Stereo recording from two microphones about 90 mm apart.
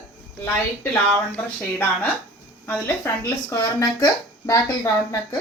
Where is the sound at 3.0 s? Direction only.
35° left (ahead or behind).